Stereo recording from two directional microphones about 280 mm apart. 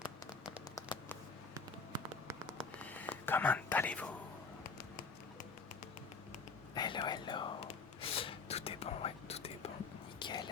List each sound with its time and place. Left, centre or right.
0.8 s a sound: centre
2.6 s whispering: centre
6.7 s whispering: centre